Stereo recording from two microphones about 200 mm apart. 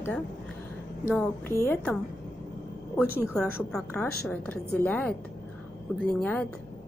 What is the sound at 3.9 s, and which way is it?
A woman's voice, 10° left (ahead or behind).